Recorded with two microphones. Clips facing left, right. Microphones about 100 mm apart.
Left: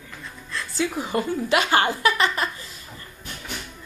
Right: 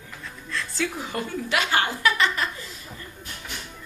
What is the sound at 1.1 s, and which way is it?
Speech, 25° left (ahead or behind).